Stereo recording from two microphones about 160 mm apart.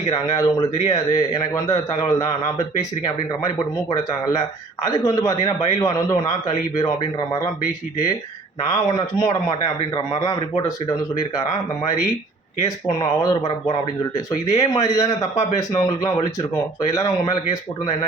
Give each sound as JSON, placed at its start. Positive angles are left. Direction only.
{"t": 0.3, "sound": "a man's voice", "side_deg": 20}
{"t": 8.7, "sound": "a man's voice", "side_deg": 25}